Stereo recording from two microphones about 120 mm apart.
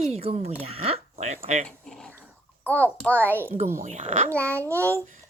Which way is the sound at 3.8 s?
90° right.